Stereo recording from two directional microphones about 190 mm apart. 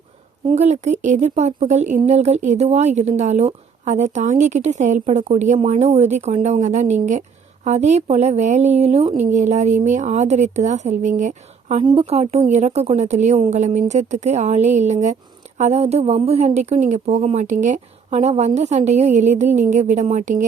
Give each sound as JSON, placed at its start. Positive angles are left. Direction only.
{"t": 0.4, "sound": "a woman's voice", "side_deg": -35}